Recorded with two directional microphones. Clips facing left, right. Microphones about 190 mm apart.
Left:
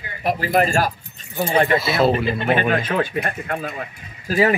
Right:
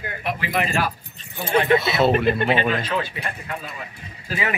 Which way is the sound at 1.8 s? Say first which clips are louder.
Left 1 dB; centre (ahead or behind).